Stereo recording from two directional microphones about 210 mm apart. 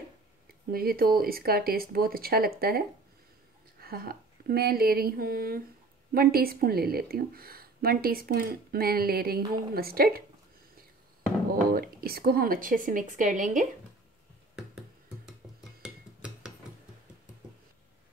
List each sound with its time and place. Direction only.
0.7 s a woman's voice: 45° right (ahead or behind)
3.8 s a woman's voice: 45° right (ahead or behind)
11.7 s speech: 45° right (ahead or behind)
14.5 s music: centre (ahead or behind)
15.8 s a sound: 5° right (ahead or behind)